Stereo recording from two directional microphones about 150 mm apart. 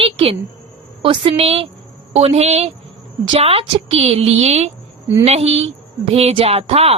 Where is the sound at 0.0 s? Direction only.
40° right (ahead or behind).